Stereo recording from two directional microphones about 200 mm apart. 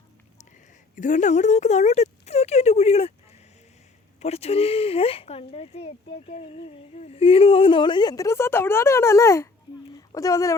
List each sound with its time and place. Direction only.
0.9 s speech: 40° left (ahead or behind)
4.2 s speech: 30° left (ahead or behind); by 10.5 s 15° left (ahead or behind)